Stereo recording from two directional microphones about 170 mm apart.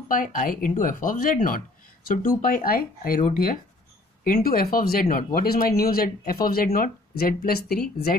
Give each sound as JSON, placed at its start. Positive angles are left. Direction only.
{"t": 0.1, "sound": "speech", "side_deg": 55}